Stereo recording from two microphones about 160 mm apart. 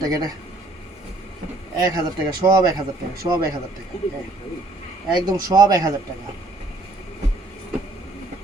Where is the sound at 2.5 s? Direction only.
25° right (ahead or behind).